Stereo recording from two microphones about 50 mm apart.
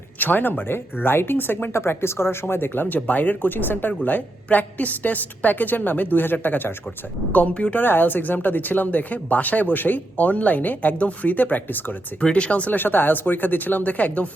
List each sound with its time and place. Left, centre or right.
0.2 s speech: left
7.3 s speech: left
7.8 s speech: left
12.2 s speech: left
12.7 s speech: left